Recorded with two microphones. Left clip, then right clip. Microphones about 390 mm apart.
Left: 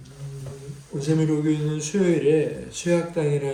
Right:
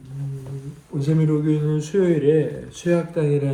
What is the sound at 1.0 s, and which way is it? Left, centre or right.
A man's voice, centre.